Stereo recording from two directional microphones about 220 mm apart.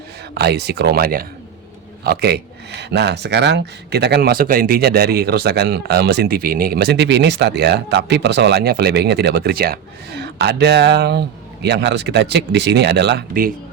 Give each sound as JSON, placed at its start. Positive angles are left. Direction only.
{"t": 0.3, "sound": "a man's voice", "side_deg": -45}